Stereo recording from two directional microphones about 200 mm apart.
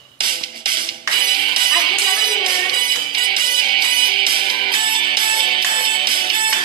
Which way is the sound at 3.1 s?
25° right (ahead or behind).